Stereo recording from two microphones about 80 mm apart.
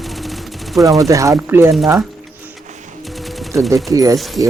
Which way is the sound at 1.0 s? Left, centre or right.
Right.